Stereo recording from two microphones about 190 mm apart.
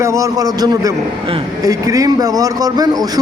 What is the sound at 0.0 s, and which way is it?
A man's voice, 15° right (ahead or behind).